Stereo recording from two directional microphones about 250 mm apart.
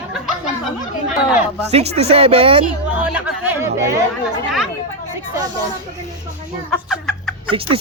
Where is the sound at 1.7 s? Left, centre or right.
Right.